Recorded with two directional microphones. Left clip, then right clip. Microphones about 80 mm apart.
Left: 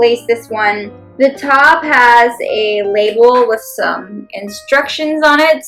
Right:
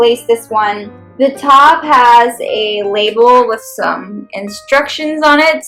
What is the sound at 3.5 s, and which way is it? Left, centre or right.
A woman's voice, right.